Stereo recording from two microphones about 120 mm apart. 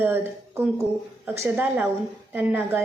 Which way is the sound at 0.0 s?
20° right (ahead or behind).